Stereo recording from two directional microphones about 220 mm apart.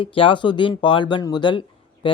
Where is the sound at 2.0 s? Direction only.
25° left (ahead or behind).